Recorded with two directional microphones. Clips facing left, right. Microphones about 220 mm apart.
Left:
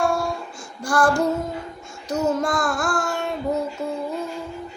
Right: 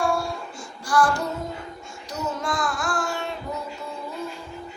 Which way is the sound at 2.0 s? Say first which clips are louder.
Left 7 dB; 50° left (ahead or behind).